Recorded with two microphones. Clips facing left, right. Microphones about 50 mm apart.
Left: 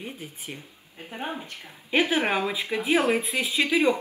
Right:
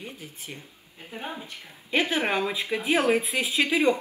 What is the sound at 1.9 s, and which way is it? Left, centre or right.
A woman's voice, centre.